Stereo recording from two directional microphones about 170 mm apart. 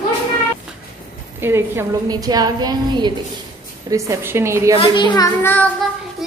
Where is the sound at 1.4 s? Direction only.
15° right (ahead or behind).